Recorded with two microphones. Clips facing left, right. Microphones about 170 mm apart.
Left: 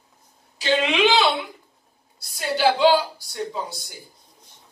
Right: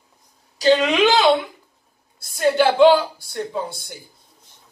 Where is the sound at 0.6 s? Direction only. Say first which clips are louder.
Right 5 dB; 40° right (ahead or behind).